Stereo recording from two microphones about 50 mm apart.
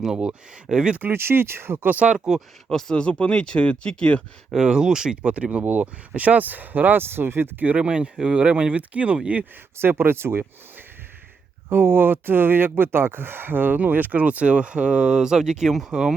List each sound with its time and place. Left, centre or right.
0.2 s speech: centre
1.1 s speech: right
1.9 s speech: right
2.6 s speech: centre
2.9 s speech: left
4.5 s speech: centre
5.2 s speech: right
7.8 s speech: centre
9.7 s speech: right
11.7 s speech: right; by 16.1 s centre